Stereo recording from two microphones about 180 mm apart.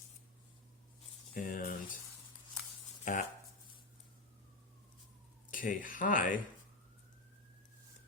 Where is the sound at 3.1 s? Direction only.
45° left (ahead or behind).